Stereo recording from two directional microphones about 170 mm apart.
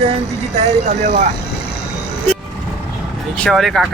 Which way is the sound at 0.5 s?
45° right (ahead or behind).